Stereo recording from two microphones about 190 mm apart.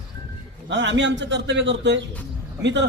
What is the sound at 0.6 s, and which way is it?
A man's voice, 70° right (ahead or behind).